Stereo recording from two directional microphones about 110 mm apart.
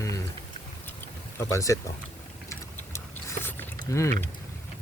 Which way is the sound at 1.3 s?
30° left (ahead or behind).